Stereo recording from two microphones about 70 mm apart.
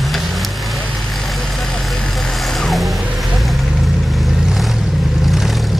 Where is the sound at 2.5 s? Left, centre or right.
Centre.